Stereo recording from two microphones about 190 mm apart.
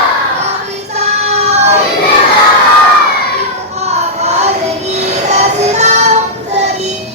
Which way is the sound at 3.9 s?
35° right (ahead or behind).